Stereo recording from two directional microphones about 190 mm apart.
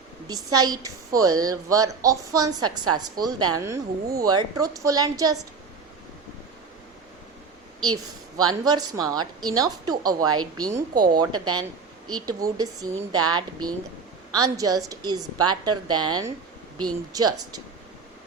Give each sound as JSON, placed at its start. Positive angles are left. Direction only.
{"t": 0.3, "sound": "a woman's voice", "side_deg": -20}
{"t": 8.6, "sound": "a woman's voice", "side_deg": -20}